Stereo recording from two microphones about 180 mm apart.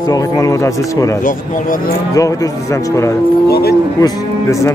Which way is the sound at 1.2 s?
45° left (ahead or behind).